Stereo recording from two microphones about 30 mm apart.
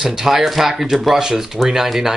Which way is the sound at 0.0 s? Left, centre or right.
Centre.